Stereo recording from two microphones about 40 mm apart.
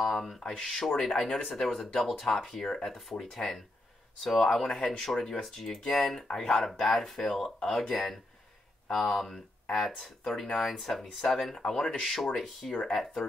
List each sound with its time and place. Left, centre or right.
0.0 s speech: centre
0.4 s speech: centre
6.1 s speech: centre
6.6 s speech: centre